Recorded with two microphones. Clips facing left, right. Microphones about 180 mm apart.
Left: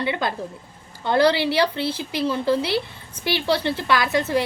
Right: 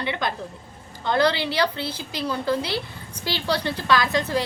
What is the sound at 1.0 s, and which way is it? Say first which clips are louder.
A woman's voice: left 3 dB; 30° left (ahead or behind).